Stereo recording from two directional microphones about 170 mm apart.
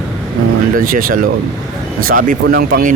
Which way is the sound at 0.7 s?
55° right (ahead or behind).